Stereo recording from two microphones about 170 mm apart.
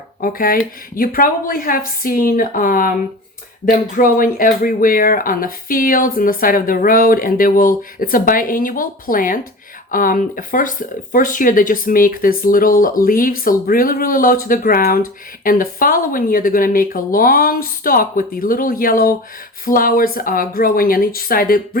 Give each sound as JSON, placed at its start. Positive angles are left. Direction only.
{"t": 0.2, "sound": "speech", "side_deg": 55}